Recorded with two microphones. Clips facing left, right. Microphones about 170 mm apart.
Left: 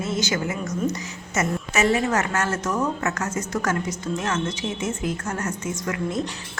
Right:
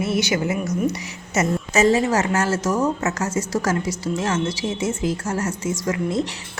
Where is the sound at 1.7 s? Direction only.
35° right (ahead or behind).